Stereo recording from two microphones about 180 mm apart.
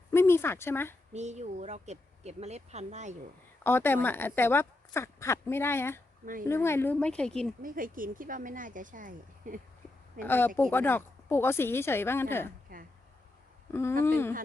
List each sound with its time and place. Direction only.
0.1 s speech: 15° left (ahead or behind)
1.1 s speech: 40° right (ahead or behind)
3.6 s speech: 10° left (ahead or behind)
7.6 s speech: 50° right (ahead or behind)
10.2 s speech: 10° left (ahead or behind)
13.7 s speech: 15° left (ahead or behind)